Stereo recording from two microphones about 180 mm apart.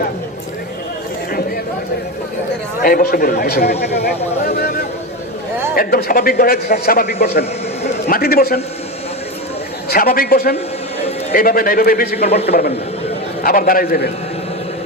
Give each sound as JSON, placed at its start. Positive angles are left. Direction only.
{"t": 2.8, "sound": "a man's voice", "side_deg": 55}
{"t": 9.9, "sound": "a man's voice", "side_deg": 55}
{"t": 13.4, "sound": "a man's voice", "side_deg": 50}